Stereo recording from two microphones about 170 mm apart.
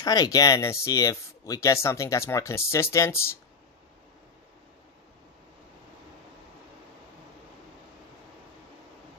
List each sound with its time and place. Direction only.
0.0 s speech: 20° left (ahead or behind)